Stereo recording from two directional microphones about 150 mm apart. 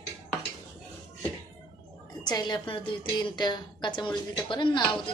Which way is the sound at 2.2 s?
30° left (ahead or behind).